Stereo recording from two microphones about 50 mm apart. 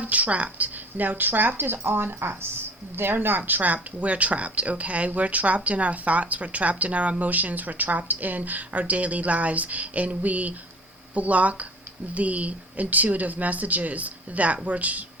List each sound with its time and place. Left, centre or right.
0.0 s speech: right